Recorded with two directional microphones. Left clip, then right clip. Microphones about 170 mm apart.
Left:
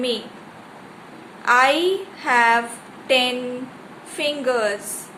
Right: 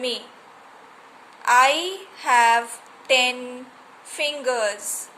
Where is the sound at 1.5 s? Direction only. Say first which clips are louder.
Left 1 dB; 35° right (ahead or behind).